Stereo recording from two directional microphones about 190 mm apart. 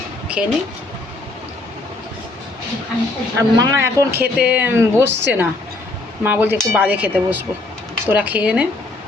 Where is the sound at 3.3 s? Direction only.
15° right (ahead or behind).